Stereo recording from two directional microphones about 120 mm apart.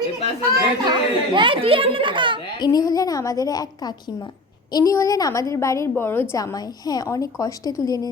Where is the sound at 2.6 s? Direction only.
35° left (ahead or behind); by 6.2 s 15° left (ahead or behind).